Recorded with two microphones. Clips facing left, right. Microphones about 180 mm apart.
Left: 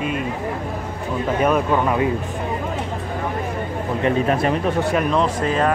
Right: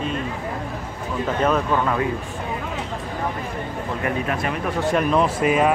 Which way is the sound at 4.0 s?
35° left (ahead or behind).